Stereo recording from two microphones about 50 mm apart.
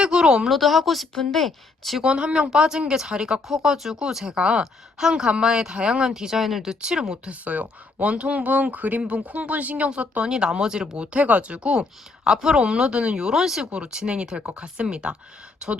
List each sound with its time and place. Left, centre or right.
0.0 s speech: centre
0.4 s a woman's voice: centre
2.0 s speech: centre
7.3 s speech: right